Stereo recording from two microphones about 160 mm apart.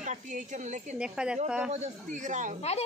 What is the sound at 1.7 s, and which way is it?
Speech, 45° right (ahead or behind).